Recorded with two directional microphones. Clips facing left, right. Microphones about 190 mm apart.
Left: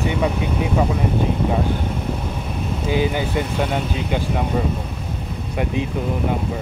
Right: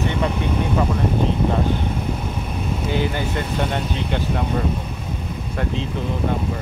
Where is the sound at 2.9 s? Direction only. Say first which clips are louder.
Left 3 dB; 15° left (ahead or behind).